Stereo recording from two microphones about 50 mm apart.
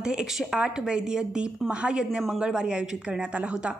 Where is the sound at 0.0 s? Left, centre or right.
Centre.